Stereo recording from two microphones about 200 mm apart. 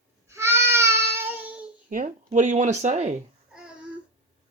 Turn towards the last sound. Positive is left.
turn(degrees=-35)  # may be behind; listen again after turning